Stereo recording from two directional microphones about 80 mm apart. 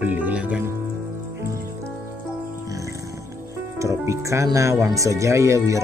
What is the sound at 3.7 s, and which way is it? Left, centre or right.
Speech, right.